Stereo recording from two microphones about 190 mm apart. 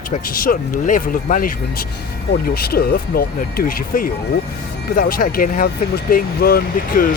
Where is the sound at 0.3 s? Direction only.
50° left (ahead or behind).